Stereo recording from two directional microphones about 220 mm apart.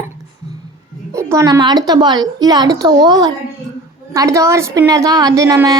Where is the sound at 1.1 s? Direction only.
15° right (ahead or behind).